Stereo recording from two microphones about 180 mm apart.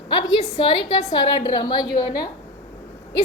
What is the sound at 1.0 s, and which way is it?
A woman's voice, 20° left (ahead or behind).